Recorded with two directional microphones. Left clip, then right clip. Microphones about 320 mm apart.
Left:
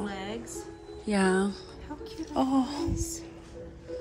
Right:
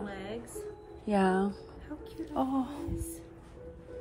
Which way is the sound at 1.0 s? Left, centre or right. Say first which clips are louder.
Left 2 dB; centre.